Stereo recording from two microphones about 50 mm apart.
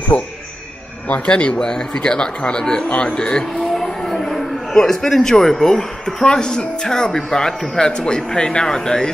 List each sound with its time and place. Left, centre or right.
0.1 s a man's voice: left
3.7 s a man's voice: centre